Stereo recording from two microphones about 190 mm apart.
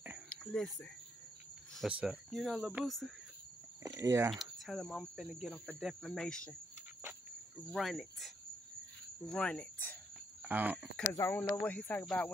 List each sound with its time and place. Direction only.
0.3 s a sound: 5° left (ahead or behind)
1.8 s speech: 5° right (ahead or behind)
3.8 s speech: 15° right (ahead or behind)
4.3 s speech: centre (ahead or behind)
7.7 s speech: centre (ahead or behind)
10.4 s speech: 10° right (ahead or behind)
11.0 s speech: 15° left (ahead or behind)